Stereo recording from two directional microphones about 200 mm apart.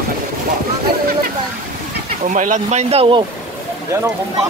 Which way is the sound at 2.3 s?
40° right (ahead or behind).